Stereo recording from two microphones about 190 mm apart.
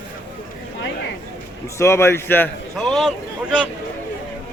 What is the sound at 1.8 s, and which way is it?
A man's voice, 15° left (ahead or behind).